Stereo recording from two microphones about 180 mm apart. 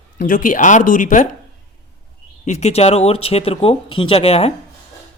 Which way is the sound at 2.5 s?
40° left (ahead or behind).